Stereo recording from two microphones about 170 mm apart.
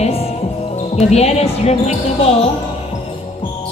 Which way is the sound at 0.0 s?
35° left (ahead or behind).